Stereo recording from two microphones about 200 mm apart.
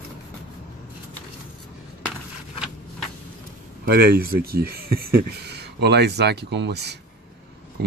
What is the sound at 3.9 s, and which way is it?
Speech, 50° right (ahead or behind).